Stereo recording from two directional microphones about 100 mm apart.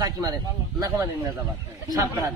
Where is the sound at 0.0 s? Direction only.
40° right (ahead or behind).